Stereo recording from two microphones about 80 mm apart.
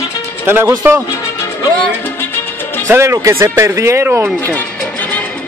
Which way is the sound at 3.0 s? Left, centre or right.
Right.